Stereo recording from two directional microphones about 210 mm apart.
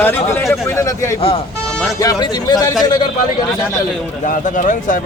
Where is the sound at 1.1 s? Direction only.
25° left (ahead or behind).